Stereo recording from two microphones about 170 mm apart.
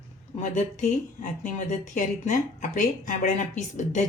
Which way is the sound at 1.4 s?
45° left (ahead or behind).